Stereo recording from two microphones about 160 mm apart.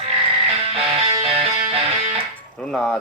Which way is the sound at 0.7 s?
40° right (ahead or behind).